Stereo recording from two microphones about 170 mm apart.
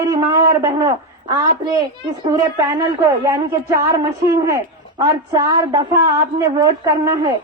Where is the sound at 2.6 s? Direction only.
20° right (ahead or behind).